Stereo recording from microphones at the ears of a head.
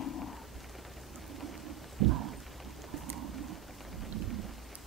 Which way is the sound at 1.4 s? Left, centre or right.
Right.